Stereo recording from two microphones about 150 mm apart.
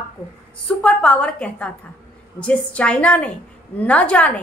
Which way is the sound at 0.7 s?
10° left (ahead or behind).